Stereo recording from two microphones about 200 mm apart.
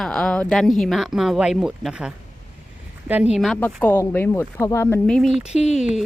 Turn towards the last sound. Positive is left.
turn(degrees=0)  # may be behind; listen again after turning